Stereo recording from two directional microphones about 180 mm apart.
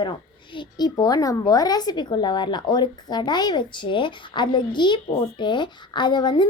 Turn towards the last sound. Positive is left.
turn(degrees=25)  # may be behind; listen again after turning